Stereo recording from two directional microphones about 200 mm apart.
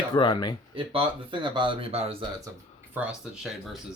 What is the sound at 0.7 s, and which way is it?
Speech, 25° right (ahead or behind).